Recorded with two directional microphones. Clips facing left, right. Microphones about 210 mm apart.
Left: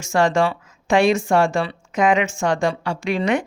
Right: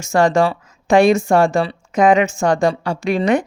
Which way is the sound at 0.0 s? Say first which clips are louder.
Right 3 dB; 40° right (ahead or behind).